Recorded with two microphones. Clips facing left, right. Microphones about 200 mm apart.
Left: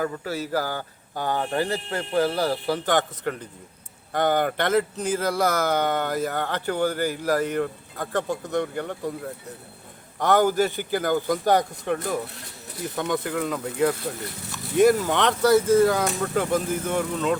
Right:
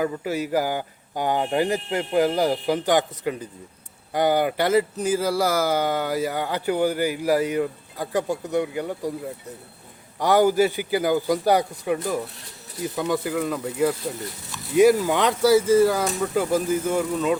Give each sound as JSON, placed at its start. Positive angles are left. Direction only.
{"t": 0.0, "sound": "speech", "side_deg": -15}
{"t": 12.7, "sound": "speech", "side_deg": -5}